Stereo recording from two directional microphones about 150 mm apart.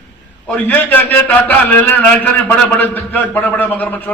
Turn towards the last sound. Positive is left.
turn(degrees=10)  # may be behind; listen again after turning